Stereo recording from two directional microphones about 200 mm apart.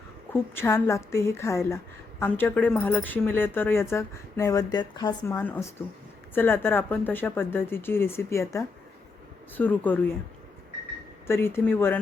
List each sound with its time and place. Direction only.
0.5 s a woman's voice: 15° left (ahead or behind)
5.4 s a woman's voice: 10° left (ahead or behind)
11.3 s a woman's voice: 10° left (ahead or behind)